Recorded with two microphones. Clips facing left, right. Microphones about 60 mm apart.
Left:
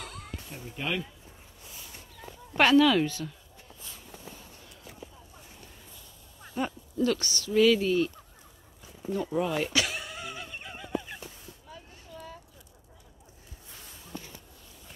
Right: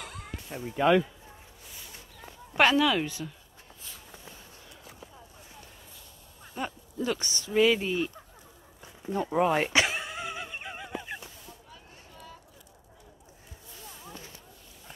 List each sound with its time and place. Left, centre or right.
0.0 s music: right
0.5 s speech: right
2.5 s speech: centre
6.6 s speech: centre
7.0 s speech: centre
9.1 s speech: right
9.9 s neigh: centre